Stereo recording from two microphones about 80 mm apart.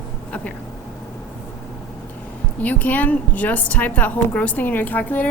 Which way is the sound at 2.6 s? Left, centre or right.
Left.